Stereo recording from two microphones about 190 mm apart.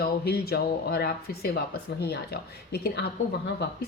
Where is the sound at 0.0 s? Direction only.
55° left (ahead or behind).